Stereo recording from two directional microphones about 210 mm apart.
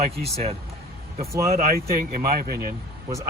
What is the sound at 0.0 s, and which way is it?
Speech, 30° right (ahead or behind).